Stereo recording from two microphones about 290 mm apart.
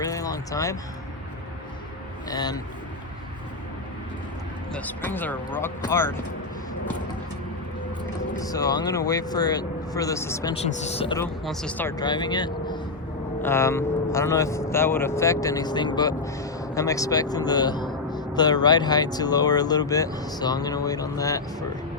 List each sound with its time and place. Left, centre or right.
0.0 s a sound: centre
2.3 s speech: centre
4.7 s speech: centre
8.4 s speech: centre
10.8 s speech: left
11.4 s speech: centre